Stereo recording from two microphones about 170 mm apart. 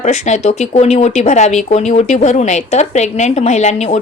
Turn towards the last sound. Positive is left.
turn(degrees=40)  # may be behind; listen again after turning